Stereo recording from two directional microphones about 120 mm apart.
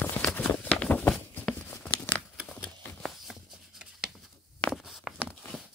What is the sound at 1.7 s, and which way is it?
Crumpling, 15° left (ahead or behind).